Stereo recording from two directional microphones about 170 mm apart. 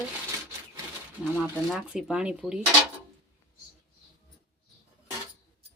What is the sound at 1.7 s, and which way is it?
Speech, 5° right (ahead or behind).